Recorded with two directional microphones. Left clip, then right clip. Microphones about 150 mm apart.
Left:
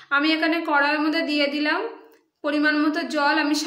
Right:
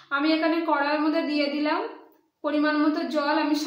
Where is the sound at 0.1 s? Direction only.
15° left (ahead or behind).